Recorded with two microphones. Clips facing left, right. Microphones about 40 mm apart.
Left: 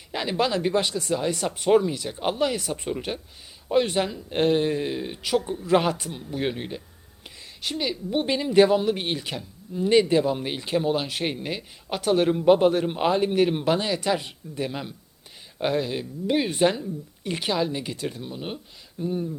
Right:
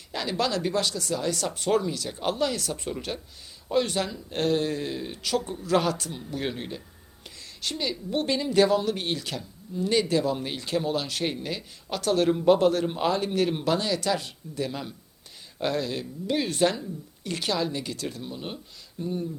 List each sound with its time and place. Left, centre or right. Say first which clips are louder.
0.1 s a woman's voice: left 3 dB; left
5.4 s speech: left 4 dB; centre
5.6 s a woman's voice: left 2 dB; left